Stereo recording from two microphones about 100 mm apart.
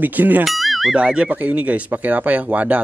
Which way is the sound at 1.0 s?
10° right (ahead or behind).